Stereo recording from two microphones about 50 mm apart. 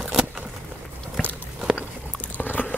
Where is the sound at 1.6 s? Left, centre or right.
Centre.